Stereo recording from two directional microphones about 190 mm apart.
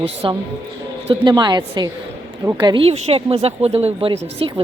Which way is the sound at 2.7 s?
30° right (ahead or behind).